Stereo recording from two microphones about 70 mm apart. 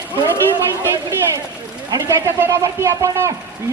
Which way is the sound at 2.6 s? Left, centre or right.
Right.